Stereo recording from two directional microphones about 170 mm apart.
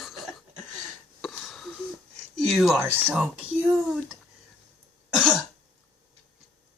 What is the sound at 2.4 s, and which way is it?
Speech, centre (ahead or behind).